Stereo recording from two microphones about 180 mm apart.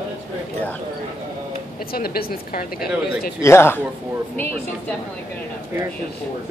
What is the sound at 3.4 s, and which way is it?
Speech, 15° left (ahead or behind).